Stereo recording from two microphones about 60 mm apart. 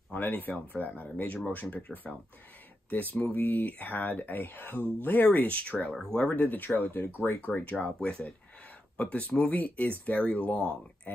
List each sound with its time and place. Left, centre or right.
0.1 s speech: left
7.8 s speech: centre